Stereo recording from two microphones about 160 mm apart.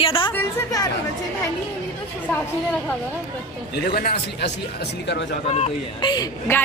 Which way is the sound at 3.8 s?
70° left (ahead or behind).